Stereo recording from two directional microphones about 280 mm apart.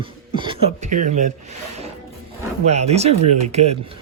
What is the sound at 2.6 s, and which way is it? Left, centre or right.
Speech, right.